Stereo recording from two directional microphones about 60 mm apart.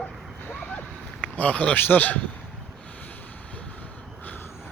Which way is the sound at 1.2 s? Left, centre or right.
Left.